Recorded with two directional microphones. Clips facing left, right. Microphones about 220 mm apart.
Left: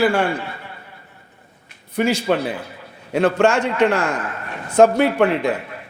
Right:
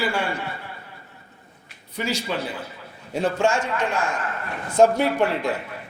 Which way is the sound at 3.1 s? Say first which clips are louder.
Left 6 dB; 70° left (ahead or behind).